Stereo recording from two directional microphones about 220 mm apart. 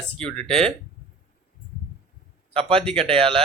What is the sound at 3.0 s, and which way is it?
Speech, 25° right (ahead or behind).